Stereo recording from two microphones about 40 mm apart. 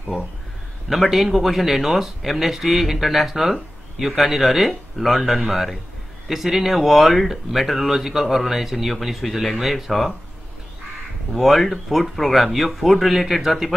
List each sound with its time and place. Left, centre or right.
0.8 s speech: centre
11.3 s speech: centre